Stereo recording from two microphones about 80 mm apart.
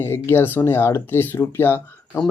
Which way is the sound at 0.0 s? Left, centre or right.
Left.